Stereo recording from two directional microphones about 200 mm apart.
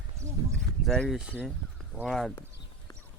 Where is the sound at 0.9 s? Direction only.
Centre (ahead or behind).